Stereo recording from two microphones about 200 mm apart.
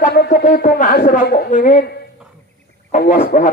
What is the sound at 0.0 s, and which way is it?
Speech, 55° left (ahead or behind).